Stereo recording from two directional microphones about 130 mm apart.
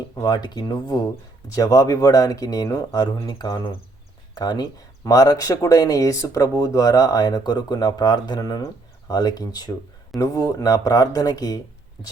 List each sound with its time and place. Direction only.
0.2 s speech: 35° left (ahead or behind)